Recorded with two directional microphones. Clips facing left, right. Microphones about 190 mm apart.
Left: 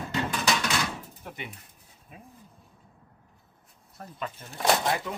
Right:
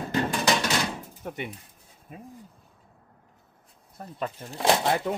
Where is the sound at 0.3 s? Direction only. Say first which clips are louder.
Right 1 dB; 25° right (ahead or behind).